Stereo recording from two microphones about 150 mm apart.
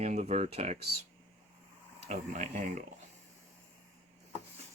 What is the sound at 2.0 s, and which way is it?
Speech, 55° right (ahead or behind).